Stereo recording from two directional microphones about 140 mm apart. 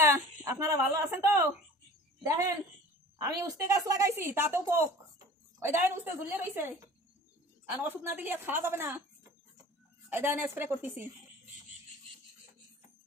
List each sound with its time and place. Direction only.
0.0 s a woman's voice: 20° right (ahead or behind)
3.2 s a woman's voice: 25° right (ahead or behind)
10.0 s a woman's voice: 15° right (ahead or behind)